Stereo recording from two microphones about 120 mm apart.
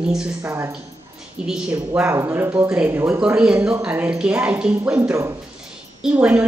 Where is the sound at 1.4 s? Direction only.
5° right (ahead or behind).